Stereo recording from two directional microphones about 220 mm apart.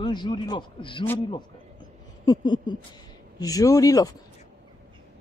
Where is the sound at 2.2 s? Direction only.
20° left (ahead or behind).